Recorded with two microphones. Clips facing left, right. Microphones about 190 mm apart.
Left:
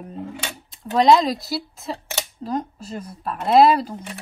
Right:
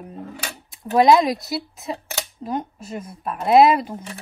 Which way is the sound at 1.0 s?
Centre (ahead or behind).